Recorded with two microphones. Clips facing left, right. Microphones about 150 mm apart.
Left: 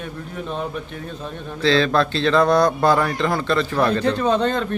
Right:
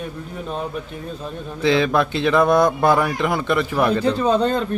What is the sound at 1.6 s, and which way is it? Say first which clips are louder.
Speech: even; 15° right (ahead or behind).